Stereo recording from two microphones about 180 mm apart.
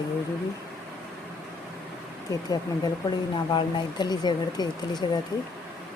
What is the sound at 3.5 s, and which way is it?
Speech, 25° left (ahead or behind).